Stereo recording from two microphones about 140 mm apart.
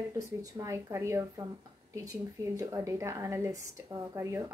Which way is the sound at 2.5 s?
20° right (ahead or behind).